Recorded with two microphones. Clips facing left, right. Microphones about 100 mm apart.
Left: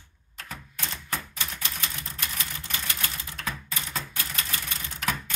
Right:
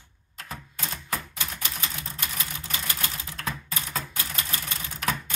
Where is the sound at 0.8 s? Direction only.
10° right (ahead or behind).